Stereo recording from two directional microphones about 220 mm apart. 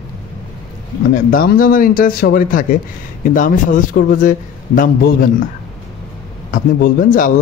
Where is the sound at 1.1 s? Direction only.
40° left (ahead or behind).